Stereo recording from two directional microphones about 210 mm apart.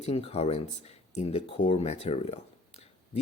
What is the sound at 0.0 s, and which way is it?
Speech, 30° left (ahead or behind).